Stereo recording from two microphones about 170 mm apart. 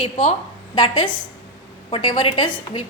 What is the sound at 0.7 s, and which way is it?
A woman's voice, 25° left (ahead or behind).